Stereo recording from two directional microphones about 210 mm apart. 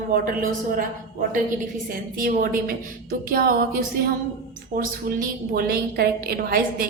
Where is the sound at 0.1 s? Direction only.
40° right (ahead or behind).